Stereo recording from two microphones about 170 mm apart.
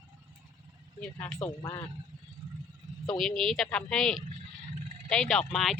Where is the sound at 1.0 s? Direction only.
10° left (ahead or behind).